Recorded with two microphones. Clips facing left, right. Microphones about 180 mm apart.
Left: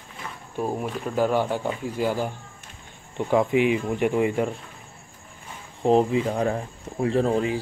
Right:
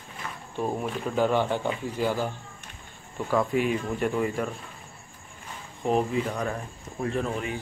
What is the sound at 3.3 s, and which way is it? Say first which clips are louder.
Speech: left 4 dB; 20° left (ahead or behind).